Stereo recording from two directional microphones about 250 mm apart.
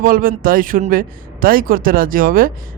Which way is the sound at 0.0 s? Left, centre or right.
Right.